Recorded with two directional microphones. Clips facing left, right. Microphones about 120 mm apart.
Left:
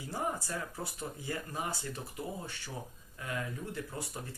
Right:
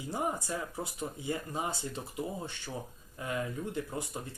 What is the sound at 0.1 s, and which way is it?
Speech, 20° right (ahead or behind).